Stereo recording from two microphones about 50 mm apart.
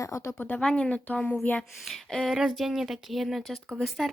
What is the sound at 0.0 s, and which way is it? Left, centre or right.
Speech, left.